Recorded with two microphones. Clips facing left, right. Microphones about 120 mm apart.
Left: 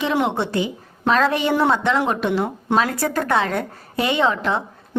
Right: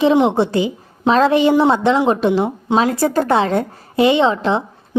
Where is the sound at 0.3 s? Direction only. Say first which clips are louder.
Right 6 dB; 30° right (ahead or behind).